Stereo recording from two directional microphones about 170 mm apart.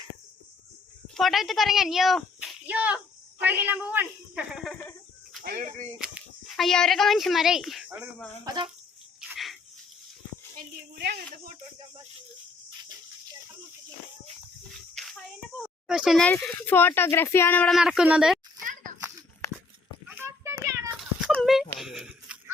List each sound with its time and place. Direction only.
1.0 s a child's voice: centre (ahead or behind)
5.4 s speech: 60° right (ahead or behind)
6.6 s speech: 5° left (ahead or behind)
8.4 s speech: 25° right (ahead or behind)
9.3 s a sound: centre (ahead or behind)
14.9 s a sound: centre (ahead or behind)
15.6 s speech: 5° right (ahead or behind)
17.7 s speech: 5° right (ahead or behind)
18.6 s a sound: 50° right (ahead or behind)
20.1 s child singing: 10° right (ahead or behind)
20.9 s cat: centre (ahead or behind)
21.8 s a sound: 5° right (ahead or behind)